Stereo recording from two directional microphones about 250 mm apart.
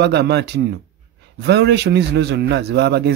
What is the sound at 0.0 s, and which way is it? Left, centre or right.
Speech, right.